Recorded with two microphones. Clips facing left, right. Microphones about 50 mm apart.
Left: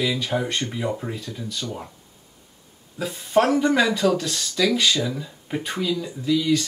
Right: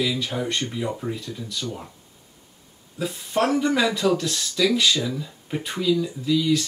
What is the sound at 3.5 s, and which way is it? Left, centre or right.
Speech, centre.